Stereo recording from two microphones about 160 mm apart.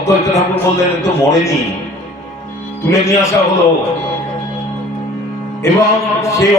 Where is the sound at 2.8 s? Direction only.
15° left (ahead or behind).